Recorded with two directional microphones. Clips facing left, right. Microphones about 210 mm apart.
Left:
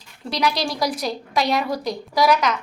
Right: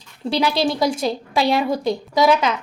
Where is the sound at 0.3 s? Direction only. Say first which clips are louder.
Right 4 dB; 30° right (ahead or behind).